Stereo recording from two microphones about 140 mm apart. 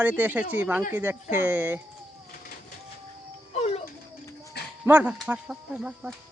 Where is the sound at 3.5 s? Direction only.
50° left (ahead or behind).